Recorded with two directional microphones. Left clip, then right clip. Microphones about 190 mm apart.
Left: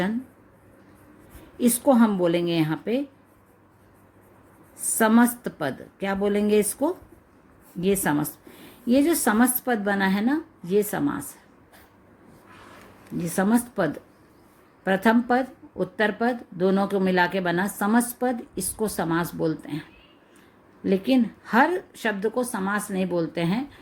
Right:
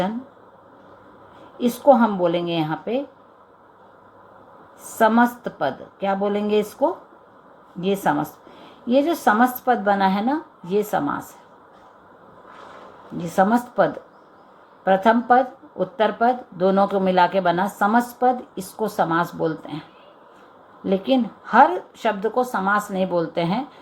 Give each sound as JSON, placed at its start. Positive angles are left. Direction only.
{"t": 1.5, "sound": "speech", "side_deg": 45}
{"t": 4.9, "sound": "speech", "side_deg": 45}
{"t": 13.3, "sound": "speech", "side_deg": 40}
{"t": 20.8, "sound": "speech", "side_deg": 40}